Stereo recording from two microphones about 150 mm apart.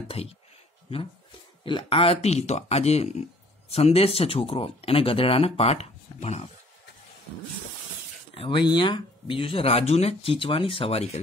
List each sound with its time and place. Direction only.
0.2 s speech: 40° left (ahead or behind)
1.6 s speech: 35° left (ahead or behind)
8.4 s speech: 35° left (ahead or behind)